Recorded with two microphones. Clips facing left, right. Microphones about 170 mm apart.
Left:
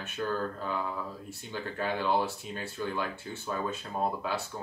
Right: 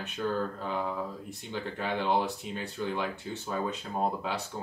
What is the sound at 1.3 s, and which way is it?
Speech, 20° right (ahead or behind).